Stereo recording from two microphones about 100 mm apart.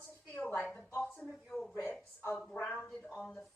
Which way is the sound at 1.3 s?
Centre (ahead or behind).